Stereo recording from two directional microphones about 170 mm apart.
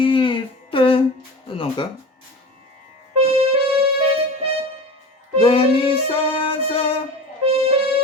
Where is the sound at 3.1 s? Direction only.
35° right (ahead or behind).